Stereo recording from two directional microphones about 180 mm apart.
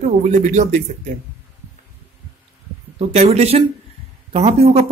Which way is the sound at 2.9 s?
35° right (ahead or behind).